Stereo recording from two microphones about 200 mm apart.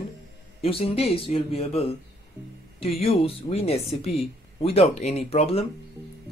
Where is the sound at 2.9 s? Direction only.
30° left (ahead or behind).